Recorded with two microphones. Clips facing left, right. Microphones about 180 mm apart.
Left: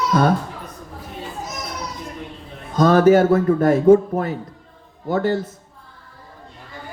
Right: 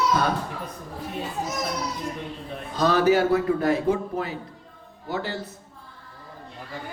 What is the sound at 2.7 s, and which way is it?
A man's voice, 45° left (ahead or behind).